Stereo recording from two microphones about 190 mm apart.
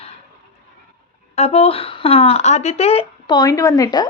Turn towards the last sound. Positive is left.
turn(degrees=20)  # may be behind; listen again after turning